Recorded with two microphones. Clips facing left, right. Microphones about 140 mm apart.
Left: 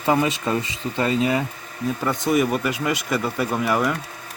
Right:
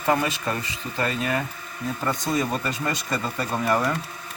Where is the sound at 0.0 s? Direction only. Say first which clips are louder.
Left 3 dB; 15° left (ahead or behind).